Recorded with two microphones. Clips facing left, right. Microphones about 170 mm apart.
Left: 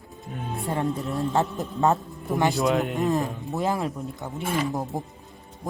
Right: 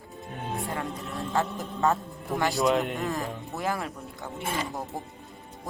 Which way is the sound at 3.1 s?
20° left (ahead or behind).